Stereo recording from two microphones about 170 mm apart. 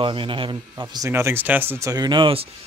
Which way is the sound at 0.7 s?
15° right (ahead or behind).